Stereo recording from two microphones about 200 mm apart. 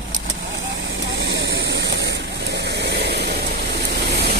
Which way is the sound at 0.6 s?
65° right (ahead or behind).